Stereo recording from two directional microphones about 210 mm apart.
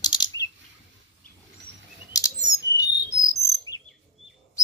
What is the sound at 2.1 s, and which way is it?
Chirp, 15° left (ahead or behind).